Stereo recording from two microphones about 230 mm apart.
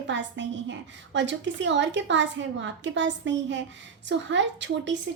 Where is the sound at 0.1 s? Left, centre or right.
Right.